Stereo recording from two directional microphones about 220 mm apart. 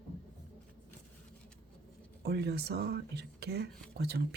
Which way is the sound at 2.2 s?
45° right (ahead or behind).